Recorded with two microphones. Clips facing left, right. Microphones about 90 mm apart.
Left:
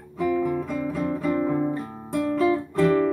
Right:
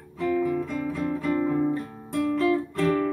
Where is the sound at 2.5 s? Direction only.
25° left (ahead or behind).